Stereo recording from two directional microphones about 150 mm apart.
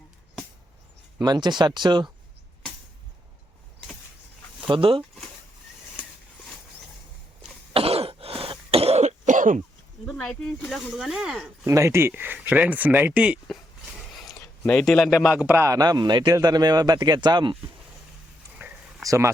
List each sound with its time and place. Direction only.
1.2 s a man's voice: 30° right (ahead or behind)
4.7 s speech: 35° right (ahead or behind)
7.7 s throat clearing: 40° right (ahead or behind); by 9.6 s 60° right (ahead or behind)
10.1 s speech: 5° left (ahead or behind)
11.6 s speech: 20° right (ahead or behind)
14.6 s a man's voice: 5° left (ahead or behind); by 17.6 s 30° right (ahead or behind)
19.0 s a man's voice: 20° right (ahead or behind)